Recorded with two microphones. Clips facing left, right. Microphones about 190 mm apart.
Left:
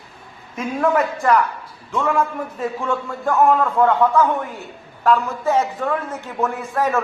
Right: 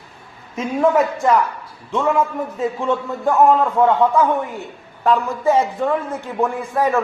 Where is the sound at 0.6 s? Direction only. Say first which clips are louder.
Right 3 dB; 5° right (ahead or behind).